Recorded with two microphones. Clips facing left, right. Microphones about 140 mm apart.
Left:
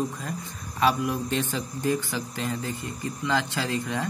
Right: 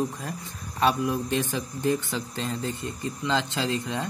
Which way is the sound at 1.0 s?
20° right (ahead or behind).